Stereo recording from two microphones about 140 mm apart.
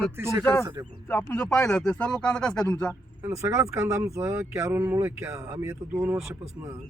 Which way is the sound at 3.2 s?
20° right (ahead or behind).